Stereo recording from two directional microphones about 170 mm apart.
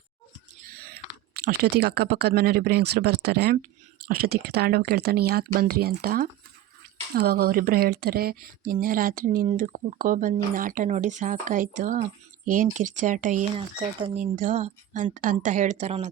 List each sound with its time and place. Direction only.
0.7 s speech: 60° right (ahead or behind); by 16.0 s 40° right (ahead or behind)